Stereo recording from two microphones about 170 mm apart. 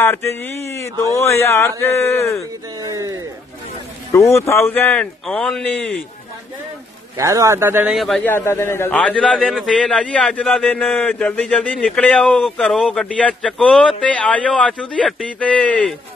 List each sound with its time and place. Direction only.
0.0 s speech: 15° left (ahead or behind)
2.8 s speech: 20° right (ahead or behind)
4.1 s a man's voice: 15° left (ahead or behind)
7.2 s a man's voice: 20° right (ahead or behind)
7.9 s a man's voice: centre (ahead or behind)
8.2 s a man's voice: 10° left (ahead or behind)